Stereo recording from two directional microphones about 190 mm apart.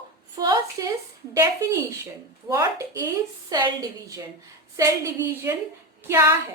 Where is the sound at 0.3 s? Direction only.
20° right (ahead or behind).